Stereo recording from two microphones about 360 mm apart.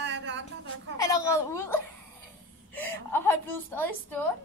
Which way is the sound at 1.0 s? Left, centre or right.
Centre.